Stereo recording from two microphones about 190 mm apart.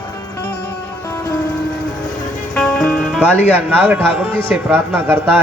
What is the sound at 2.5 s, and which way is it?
Music, 5° left (ahead or behind).